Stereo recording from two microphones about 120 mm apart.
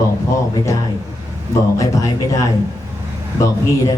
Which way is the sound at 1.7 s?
30° left (ahead or behind).